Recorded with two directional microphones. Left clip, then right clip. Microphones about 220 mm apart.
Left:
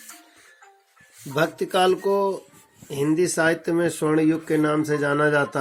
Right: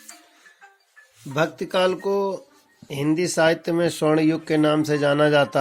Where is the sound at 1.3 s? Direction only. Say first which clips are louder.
Even; 30° right (ahead or behind).